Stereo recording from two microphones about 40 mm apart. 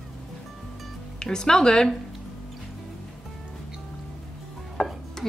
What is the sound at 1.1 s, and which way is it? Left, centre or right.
Speech, centre.